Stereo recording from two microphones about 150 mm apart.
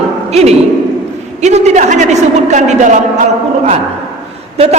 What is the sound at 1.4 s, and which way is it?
A man's voice, 50° right (ahead or behind).